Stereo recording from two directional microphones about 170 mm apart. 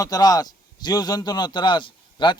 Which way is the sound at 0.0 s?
25° left (ahead or behind).